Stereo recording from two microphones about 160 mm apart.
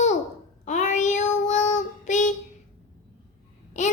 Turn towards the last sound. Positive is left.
turn(degrees=45)  # may be behind; listen again after turning